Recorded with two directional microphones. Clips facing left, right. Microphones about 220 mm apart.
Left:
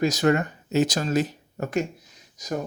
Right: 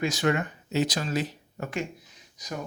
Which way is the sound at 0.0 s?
40° left (ahead or behind).